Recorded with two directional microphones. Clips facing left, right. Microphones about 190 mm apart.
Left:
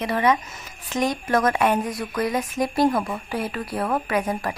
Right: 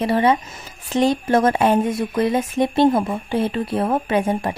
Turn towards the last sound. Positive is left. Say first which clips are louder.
# right 4 dB
turn(degrees=-25)  # may be behind; listen again after turning